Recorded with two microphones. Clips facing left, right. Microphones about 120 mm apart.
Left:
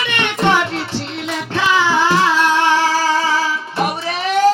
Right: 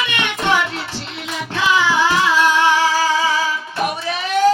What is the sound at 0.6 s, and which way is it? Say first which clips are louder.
Music: left 3 dB; 30° left (ahead or behind).